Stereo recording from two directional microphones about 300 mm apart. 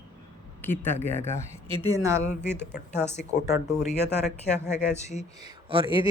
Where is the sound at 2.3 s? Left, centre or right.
Left.